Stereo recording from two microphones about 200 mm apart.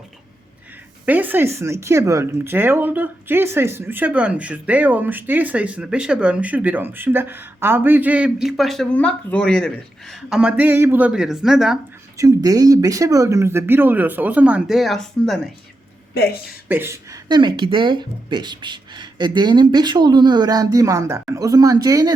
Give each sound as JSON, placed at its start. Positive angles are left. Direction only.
{"t": 1.0, "sound": "speech", "side_deg": -10}
{"t": 12.1, "sound": "speech", "side_deg": -15}
{"t": 16.1, "sound": "speech", "side_deg": 50}
{"t": 16.6, "sound": "speech", "side_deg": -10}